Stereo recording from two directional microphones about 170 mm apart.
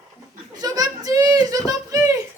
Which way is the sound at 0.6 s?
25° right (ahead or behind).